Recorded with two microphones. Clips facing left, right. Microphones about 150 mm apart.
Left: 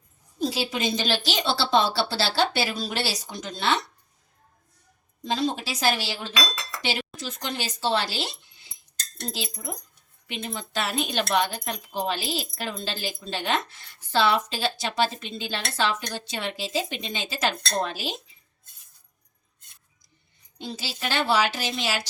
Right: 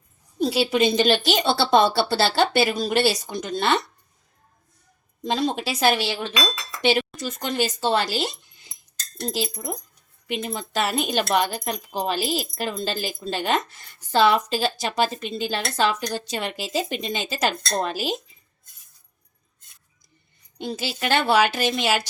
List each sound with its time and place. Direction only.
0.3 s speech: 60° right (ahead or behind)
5.3 s speech: 55° right (ahead or behind)
7.2 s speech: 45° right (ahead or behind)
10.2 s speech: 45° right (ahead or behind)
20.6 s speech: 55° right (ahead or behind)